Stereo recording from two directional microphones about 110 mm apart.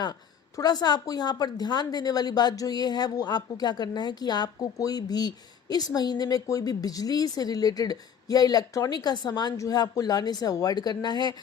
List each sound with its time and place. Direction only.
0.0 s a woman's voice: 40° left (ahead or behind)